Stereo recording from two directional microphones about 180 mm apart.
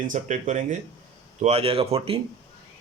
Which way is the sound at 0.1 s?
45° right (ahead or behind).